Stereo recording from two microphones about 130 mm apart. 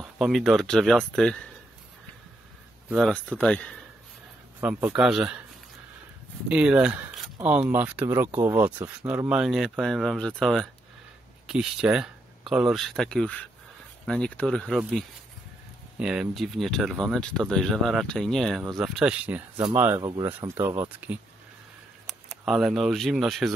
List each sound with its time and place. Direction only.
0.0 s speech: centre (ahead or behind)
3.1 s speech: 10° left (ahead or behind)
4.6 s speech: 15° right (ahead or behind)
6.5 s speech: 10° right (ahead or behind)
9.3 s speech: 5° right (ahead or behind)
16.0 s speech: 5° right (ahead or behind)
20.0 s speech: 30° right (ahead or behind)
20.2 s speech: 15° right (ahead or behind)
22.0 s speech: centre (ahead or behind)